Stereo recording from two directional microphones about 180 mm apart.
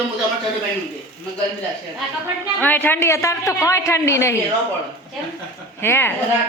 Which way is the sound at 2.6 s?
10° left (ahead or behind).